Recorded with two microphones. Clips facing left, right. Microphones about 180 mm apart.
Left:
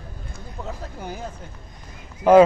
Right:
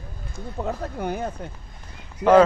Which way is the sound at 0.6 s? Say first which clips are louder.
Right 6 dB; 65° right (ahead or behind).